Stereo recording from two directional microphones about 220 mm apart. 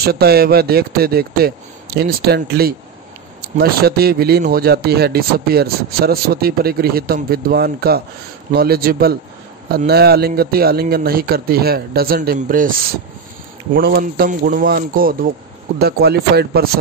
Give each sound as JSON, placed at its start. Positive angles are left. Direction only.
{"t": 0.0, "sound": "speech", "side_deg": -45}
{"t": 13.7, "sound": "speech", "side_deg": -45}